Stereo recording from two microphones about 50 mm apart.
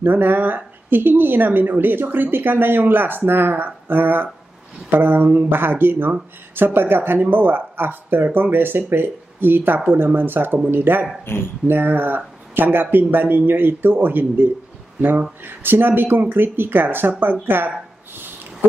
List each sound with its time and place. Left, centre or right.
0.0 s speech: right
11.3 s speech: left
11.6 s speech: right